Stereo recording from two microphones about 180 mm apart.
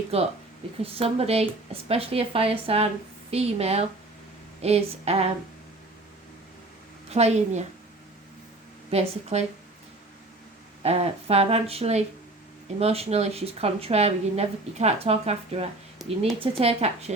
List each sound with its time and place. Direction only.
0.1 s a woman's voice: 35° right (ahead or behind)
7.1 s a woman's voice: 35° right (ahead or behind)
8.9 s a woman's voice: 35° right (ahead or behind)
10.8 s a woman's voice: 35° right (ahead or behind)
16.0 s speech: centre (ahead or behind)
16.4 s a woman's voice: 35° right (ahead or behind)